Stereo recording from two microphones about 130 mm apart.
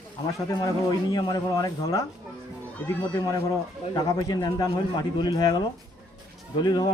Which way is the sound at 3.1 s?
30° left (ahead or behind).